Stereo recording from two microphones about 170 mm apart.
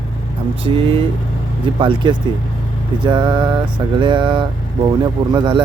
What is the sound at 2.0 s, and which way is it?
Speech, 30° right (ahead or behind).